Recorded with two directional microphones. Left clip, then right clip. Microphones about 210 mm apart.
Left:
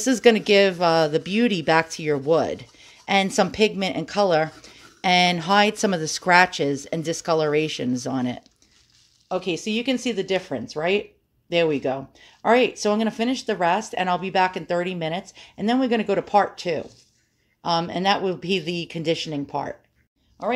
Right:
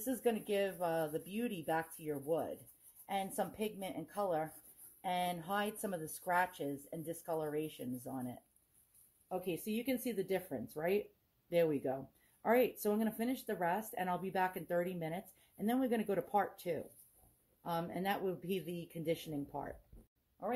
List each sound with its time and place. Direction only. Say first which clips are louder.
0.0 s speech: left 19 dB; 45° left (ahead or behind)
9.3 s speech: left 15 dB; 15° left (ahead or behind)